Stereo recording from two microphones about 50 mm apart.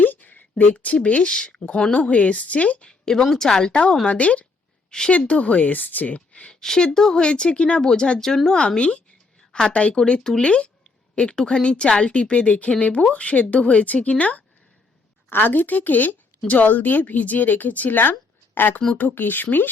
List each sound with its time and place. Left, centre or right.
0.0 s a sound: left
0.6 s a woman's voice: left
3.2 s a woman's voice: centre; by 4.4 s left
4.9 s a woman's voice: centre
15.3 s speech: left